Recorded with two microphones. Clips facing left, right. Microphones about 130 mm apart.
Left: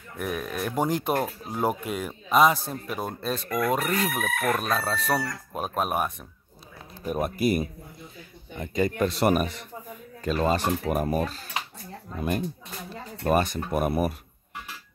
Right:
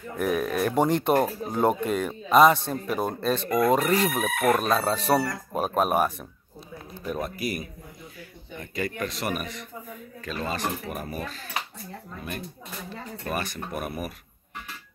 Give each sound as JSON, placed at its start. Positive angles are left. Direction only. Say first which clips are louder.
{"t": 0.2, "sound": "speech", "louder": "right 5 dB", "side_deg": 0}
{"t": 3.4, "sound": "speech", "louder": "right 4 dB", "side_deg": -30}
{"t": 3.8, "sound": "speech", "louder": "right 3 dB", "side_deg": 0}
{"t": 7.1, "sound": "speech", "louder": "left 5 dB", "side_deg": 15}
{"t": 10.2, "sound": "speech", "louder": "left 6 dB", "side_deg": 35}